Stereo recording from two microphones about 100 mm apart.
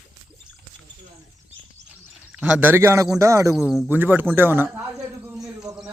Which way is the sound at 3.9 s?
20° right (ahead or behind).